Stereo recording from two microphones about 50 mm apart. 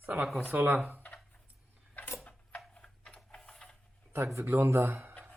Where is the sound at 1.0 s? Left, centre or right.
Left.